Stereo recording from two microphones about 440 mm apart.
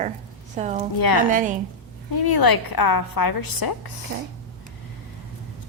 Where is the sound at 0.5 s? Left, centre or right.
Centre.